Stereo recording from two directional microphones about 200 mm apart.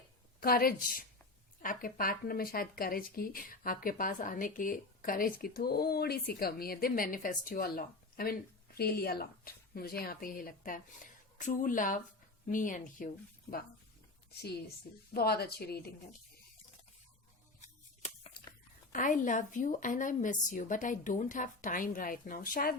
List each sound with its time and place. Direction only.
0.3 s a woman's voice: 45° left (ahead or behind)
15.1 s speech: 50° left (ahead or behind)
17.6 s a sound: 35° left (ahead or behind)
18.9 s a woman's voice: 40° left (ahead or behind)